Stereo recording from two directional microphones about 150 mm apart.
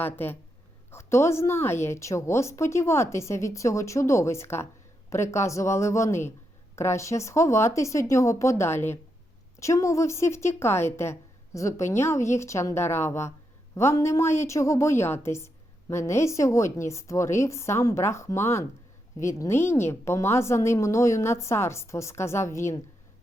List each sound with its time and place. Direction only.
0.0 s a woman's voice: 15° left (ahead or behind)